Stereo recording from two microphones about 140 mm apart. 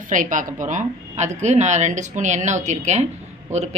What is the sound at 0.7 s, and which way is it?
Speech, 55° right (ahead or behind).